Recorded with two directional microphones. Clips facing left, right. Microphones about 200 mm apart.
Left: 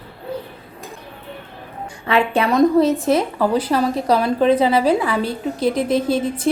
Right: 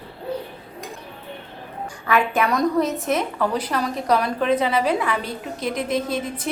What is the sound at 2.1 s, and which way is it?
A woman's voice, 30° left (ahead or behind).